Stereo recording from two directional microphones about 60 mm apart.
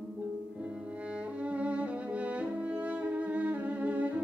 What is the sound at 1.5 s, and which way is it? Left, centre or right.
Music, right.